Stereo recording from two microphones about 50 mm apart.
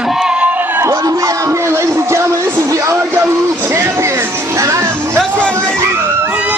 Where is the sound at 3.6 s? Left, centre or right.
Right.